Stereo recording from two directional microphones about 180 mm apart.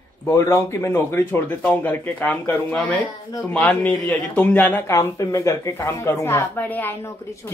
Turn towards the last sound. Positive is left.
turn(degrees=15)  # may be behind; listen again after turning